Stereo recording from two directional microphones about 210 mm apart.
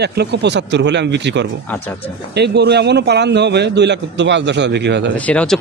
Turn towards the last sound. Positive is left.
turn(degrees=5)  # may be behind; listen again after turning